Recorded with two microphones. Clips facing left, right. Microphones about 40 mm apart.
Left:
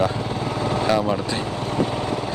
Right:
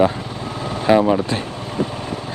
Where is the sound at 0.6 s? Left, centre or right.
Centre.